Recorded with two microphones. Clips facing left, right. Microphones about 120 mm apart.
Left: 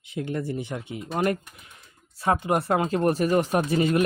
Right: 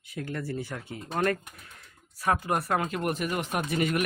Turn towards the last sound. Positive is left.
turn(degrees=30)  # may be behind; listen again after turning